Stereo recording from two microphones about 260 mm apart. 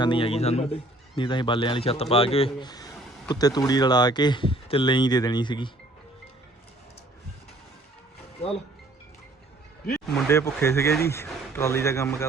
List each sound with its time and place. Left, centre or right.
0.0 s a man's voice: centre
10.2 s speech: centre